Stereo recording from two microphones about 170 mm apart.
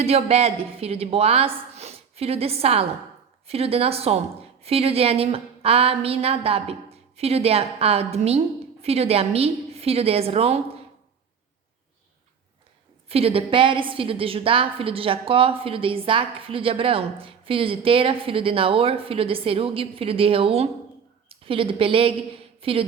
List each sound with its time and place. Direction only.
0.0 s a woman's voice: 35° right (ahead or behind)
13.1 s a woman's voice: 35° right (ahead or behind)